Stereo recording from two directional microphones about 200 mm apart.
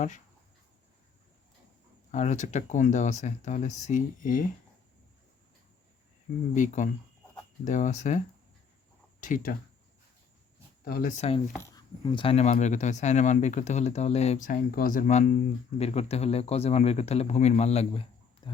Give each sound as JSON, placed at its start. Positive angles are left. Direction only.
{"t": 2.1, "sound": "speech", "side_deg": 35}
{"t": 6.5, "sound": "speech", "side_deg": 40}
{"t": 9.2, "sound": "speech", "side_deg": 40}
{"t": 10.8, "sound": "speech", "side_deg": 45}
{"t": 11.2, "sound": "speech", "side_deg": 30}